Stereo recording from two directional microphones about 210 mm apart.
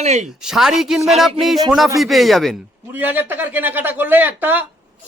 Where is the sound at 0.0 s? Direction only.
30° right (ahead or behind).